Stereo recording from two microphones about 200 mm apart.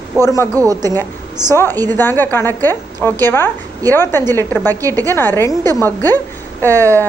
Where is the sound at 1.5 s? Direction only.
10° left (ahead or behind).